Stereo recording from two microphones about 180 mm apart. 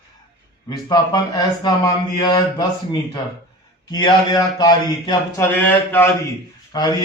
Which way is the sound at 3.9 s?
25° left (ahead or behind).